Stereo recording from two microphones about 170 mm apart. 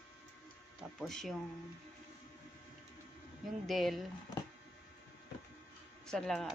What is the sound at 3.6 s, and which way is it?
Speech, centre (ahead or behind).